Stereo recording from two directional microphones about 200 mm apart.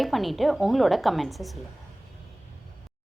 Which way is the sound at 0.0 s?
Centre (ahead or behind).